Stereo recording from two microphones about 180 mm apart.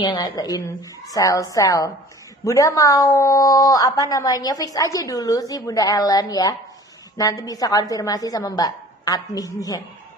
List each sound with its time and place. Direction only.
0.0 s speech: 25° left (ahead or behind)